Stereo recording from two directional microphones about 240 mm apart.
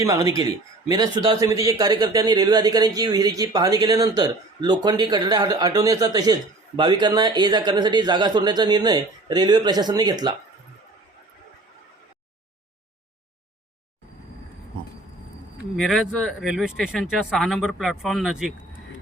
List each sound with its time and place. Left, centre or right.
0.0 s a man's voice: centre
15.7 s speech: centre